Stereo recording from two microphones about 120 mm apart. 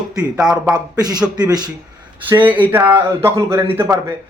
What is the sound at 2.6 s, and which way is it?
A man's voice, 15° right (ahead or behind).